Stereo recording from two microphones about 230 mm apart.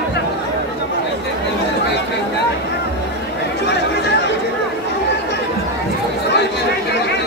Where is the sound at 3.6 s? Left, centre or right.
Left.